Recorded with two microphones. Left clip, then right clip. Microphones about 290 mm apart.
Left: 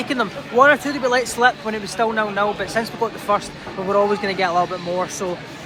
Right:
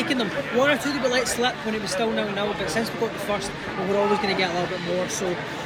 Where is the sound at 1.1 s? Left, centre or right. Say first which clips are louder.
Left 5 dB; centre.